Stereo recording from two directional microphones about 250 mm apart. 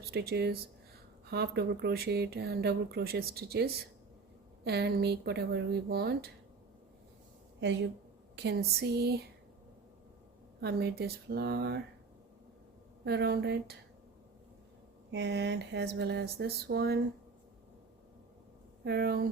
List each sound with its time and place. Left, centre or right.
0.1 s speech: right
8.4 s speech: right
10.6 s speech: right
13.1 s speech: right
15.1 s speech: right
18.9 s speech: right